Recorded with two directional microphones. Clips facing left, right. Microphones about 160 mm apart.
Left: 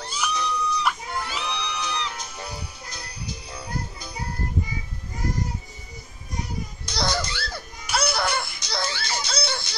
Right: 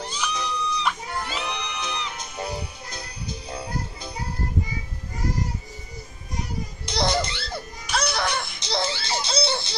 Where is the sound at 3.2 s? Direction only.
55° right (ahead or behind).